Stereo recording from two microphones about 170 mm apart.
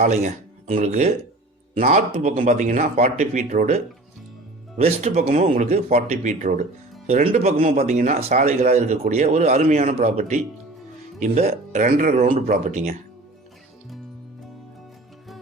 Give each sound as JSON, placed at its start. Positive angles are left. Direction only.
{"t": 0.0, "sound": "speech", "side_deg": -45}
{"t": 4.8, "sound": "speech", "side_deg": -40}